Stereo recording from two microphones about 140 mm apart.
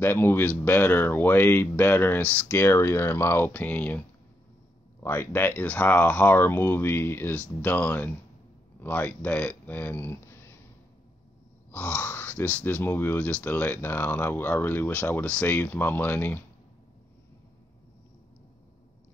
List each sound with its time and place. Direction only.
0.0 s speech: 15° left (ahead or behind)
5.0 s speech: 20° left (ahead or behind)
11.7 s speech: 10° left (ahead or behind)